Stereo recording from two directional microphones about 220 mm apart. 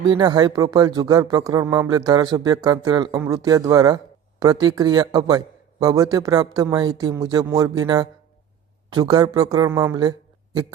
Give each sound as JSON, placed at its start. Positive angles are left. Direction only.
{"t": 0.1, "sound": "a man's voice", "side_deg": -20}